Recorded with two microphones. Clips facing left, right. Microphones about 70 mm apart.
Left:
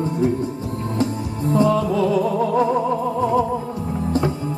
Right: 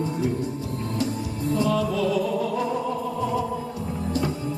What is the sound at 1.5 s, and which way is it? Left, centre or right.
Music, left.